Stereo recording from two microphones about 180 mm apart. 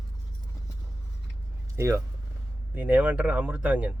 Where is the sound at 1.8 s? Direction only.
15° right (ahead or behind).